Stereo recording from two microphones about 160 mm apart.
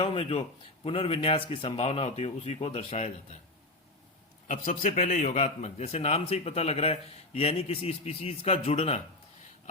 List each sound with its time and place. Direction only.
0.0 s a man's voice: 40° left (ahead or behind)
4.4 s a man's voice: 55° left (ahead or behind)